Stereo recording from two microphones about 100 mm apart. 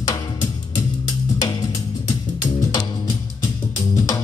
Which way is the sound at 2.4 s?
45° left (ahead or behind).